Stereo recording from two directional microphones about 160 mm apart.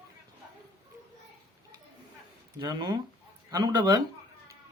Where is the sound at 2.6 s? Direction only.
25° right (ahead or behind).